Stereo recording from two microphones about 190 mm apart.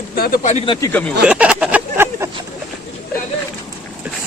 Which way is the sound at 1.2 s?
5° right (ahead or behind).